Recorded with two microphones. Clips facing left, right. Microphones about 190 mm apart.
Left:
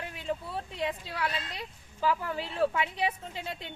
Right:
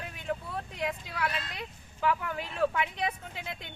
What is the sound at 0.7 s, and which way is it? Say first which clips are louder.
A woman's voice: left 1 dB; 30° left (ahead or behind).